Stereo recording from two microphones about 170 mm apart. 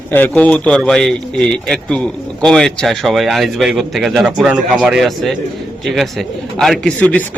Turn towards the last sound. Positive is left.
turn(degrees=10)  # may be behind; listen again after turning